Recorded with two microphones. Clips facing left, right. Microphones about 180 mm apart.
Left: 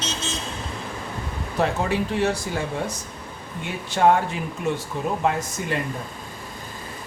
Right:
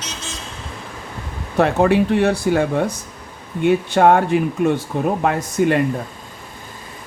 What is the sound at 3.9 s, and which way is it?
Speech, 60° right (ahead or behind).